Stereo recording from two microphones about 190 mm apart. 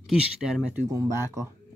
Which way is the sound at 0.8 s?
15° right (ahead or behind).